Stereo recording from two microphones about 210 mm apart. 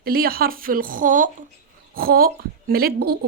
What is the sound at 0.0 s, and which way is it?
A woman's voice, 45° right (ahead or behind).